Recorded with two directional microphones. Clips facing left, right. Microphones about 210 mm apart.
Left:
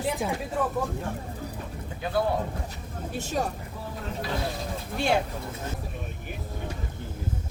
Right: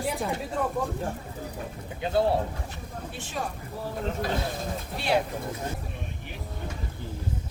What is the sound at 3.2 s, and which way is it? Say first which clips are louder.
Speech: left 6 dB; 40° left (ahead or behind).